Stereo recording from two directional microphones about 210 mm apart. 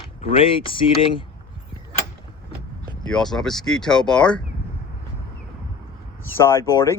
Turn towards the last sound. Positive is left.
turn(degrees=15)  # may be behind; listen again after turning